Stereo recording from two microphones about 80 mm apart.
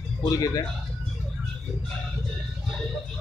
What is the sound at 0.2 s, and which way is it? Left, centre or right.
Speech, left.